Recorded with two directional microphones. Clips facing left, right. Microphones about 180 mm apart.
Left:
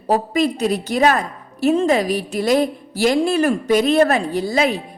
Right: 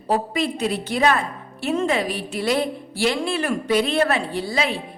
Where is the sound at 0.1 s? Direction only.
40° left (ahead or behind).